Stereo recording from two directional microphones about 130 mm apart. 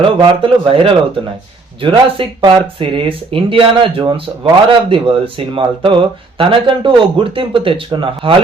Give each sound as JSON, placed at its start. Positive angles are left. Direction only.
{"t": 0.0, "sound": "speech", "side_deg": -40}